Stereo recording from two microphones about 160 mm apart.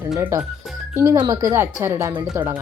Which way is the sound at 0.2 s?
15° right (ahead or behind).